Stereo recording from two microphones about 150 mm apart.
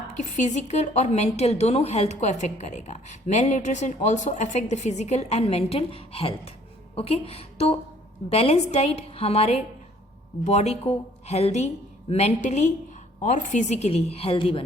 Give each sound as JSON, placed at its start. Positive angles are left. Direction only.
{"t": 0.2, "sound": "a woman's voice", "side_deg": 50}